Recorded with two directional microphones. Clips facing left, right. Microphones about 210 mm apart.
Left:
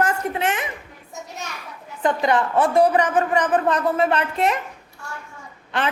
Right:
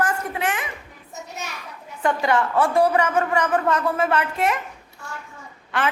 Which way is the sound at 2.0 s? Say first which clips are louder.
Left 1 dB; 20° left (ahead or behind).